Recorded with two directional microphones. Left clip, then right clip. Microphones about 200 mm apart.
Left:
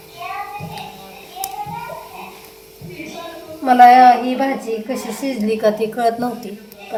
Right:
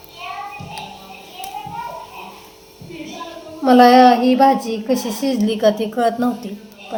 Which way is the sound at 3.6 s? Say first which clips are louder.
Left 2 dB; 15° right (ahead or behind).